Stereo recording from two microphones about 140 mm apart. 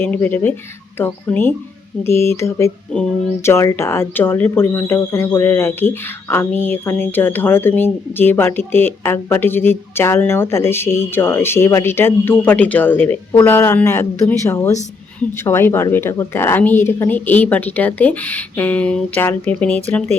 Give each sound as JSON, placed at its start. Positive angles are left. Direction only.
{"t": 0.0, "sound": "speech", "side_deg": 15}